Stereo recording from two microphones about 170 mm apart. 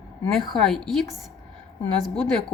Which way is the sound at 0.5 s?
5° left (ahead or behind).